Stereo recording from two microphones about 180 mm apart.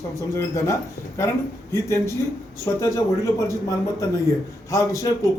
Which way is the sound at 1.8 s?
15° left (ahead or behind).